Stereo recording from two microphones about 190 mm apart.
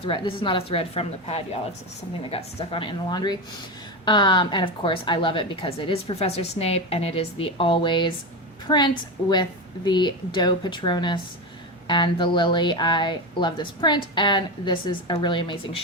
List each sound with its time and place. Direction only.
0.0 s a woman's voice: 25° left (ahead or behind)